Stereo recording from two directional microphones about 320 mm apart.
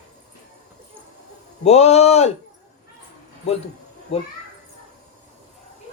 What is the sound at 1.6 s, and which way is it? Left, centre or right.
Speech, centre.